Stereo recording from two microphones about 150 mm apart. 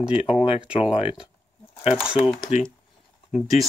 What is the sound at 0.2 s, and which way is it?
Speech, 40° left (ahead or behind).